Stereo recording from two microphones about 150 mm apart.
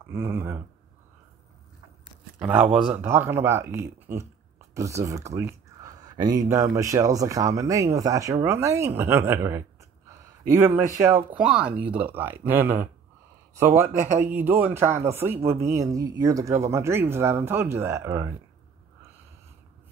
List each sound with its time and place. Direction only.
0.0 s speech: 15° right (ahead or behind)
2.3 s speech: 10° right (ahead or behind)
11.3 s speech: 5° right (ahead or behind)